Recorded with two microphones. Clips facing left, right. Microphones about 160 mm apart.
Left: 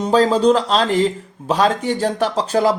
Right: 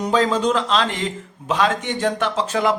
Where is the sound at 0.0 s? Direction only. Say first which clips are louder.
Left 5 dB; 35° left (ahead or behind).